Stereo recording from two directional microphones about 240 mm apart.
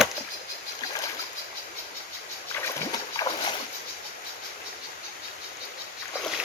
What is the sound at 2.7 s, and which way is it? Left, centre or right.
Boat, centre.